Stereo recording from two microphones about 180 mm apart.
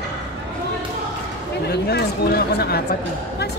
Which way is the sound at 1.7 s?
60° left (ahead or behind).